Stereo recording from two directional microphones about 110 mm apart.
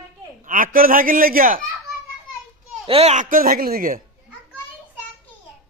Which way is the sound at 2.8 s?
65° right (ahead or behind).